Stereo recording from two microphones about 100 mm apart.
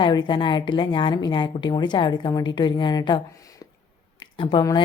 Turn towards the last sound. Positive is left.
turn(degrees=50)  # may be behind; listen again after turning